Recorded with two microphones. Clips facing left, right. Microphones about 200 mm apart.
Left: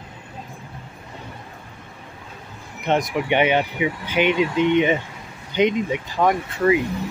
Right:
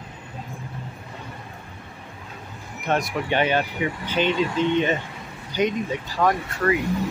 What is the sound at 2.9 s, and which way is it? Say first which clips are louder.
Speech: left 3 dB; 20° left (ahead or behind).